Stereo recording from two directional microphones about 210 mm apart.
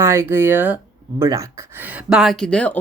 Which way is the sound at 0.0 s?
10° right (ahead or behind).